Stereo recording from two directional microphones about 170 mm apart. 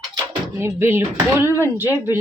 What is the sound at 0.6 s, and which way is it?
Speech, 15° right (ahead or behind).